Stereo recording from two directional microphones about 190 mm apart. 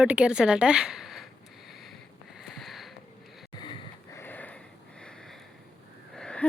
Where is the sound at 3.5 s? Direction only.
25° left (ahead or behind).